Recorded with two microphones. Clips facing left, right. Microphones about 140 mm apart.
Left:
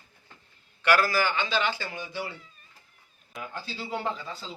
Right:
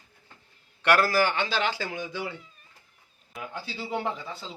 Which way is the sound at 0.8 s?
60° right (ahead or behind).